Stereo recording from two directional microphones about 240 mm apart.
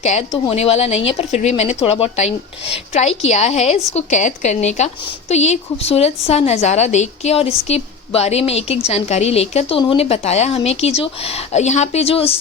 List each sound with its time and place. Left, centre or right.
0.0 s speech: left